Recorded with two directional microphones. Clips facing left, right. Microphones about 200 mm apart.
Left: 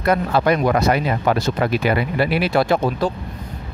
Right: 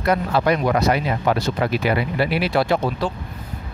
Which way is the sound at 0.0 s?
50° left (ahead or behind).